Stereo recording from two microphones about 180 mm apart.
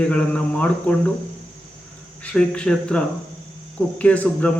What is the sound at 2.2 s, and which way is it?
Speech, 5° left (ahead or behind).